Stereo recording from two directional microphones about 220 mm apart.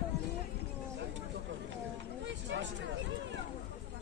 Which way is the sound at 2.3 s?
55° right (ahead or behind).